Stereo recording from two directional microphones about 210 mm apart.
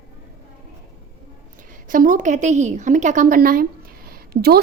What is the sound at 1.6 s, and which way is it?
A woman's voice, 40° right (ahead or behind).